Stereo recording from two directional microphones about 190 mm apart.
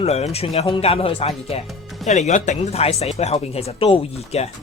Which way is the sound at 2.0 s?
40° left (ahead or behind).